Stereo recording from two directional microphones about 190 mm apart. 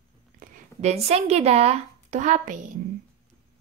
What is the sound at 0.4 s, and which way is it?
Speech, 35° right (ahead or behind).